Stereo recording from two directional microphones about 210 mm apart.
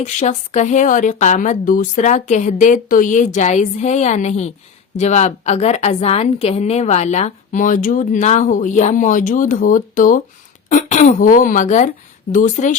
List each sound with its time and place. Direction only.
0.0 s a woman's voice: 35° left (ahead or behind)